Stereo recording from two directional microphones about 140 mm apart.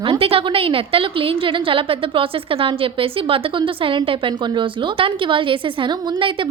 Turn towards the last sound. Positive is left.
turn(degrees=-35)  # may be behind; listen again after turning